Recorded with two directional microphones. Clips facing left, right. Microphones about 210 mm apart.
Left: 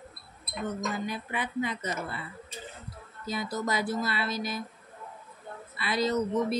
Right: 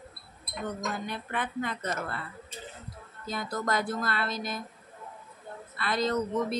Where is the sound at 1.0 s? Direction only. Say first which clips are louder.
Left 1 dB; 5° left (ahead or behind).